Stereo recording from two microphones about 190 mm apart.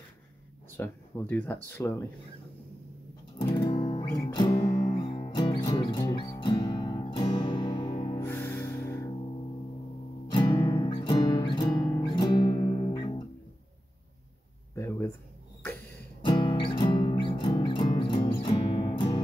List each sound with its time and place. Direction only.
0.7 s speech: 10° left (ahead or behind)
3.5 s music: 25° left (ahead or behind)
8.2 s music: 10° left (ahead or behind)
10.3 s music: 25° left (ahead or behind)
14.8 s a sound: 15° left (ahead or behind)
16.3 s music: 25° left (ahead or behind)